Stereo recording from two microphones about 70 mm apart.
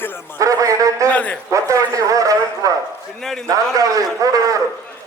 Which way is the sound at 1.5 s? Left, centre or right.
Right.